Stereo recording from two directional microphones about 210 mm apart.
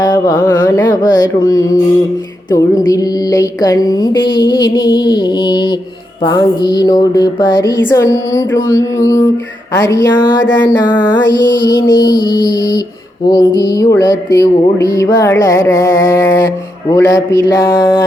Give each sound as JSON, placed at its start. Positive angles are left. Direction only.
{"t": 0.0, "sound": "mantra", "side_deg": 20}